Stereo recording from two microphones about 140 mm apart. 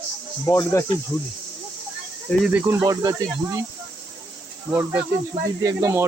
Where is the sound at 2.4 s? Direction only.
15° right (ahead or behind).